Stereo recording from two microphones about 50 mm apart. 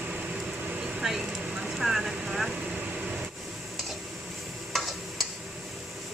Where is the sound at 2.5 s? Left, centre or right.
Right.